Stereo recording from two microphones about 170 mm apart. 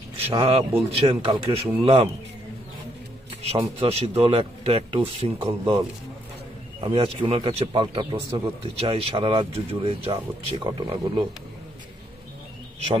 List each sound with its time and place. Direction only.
0.3 s a man's voice: 35° right (ahead or behind)
3.8 s a man's voice: 35° right (ahead or behind)
6.8 s a man's voice: 35° right (ahead or behind)